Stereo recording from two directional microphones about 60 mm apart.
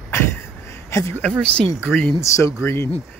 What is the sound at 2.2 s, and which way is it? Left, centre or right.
Speech, left.